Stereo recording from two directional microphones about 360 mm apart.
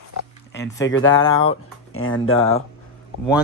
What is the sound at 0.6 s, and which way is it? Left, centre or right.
Speech, centre.